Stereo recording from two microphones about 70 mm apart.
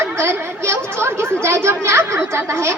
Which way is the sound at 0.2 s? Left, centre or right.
Right.